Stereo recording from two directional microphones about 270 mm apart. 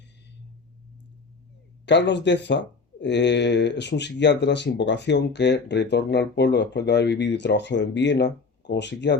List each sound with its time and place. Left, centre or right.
1.9 s speech: left